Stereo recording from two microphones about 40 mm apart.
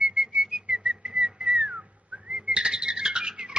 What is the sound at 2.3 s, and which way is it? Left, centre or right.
Bird, centre.